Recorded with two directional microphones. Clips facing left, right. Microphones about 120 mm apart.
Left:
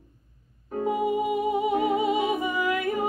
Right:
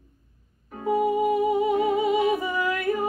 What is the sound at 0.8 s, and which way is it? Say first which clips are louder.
Music: right 3 dB; 20° left (ahead or behind).